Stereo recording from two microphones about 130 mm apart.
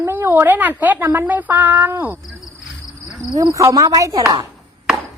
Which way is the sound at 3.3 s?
25° right (ahead or behind).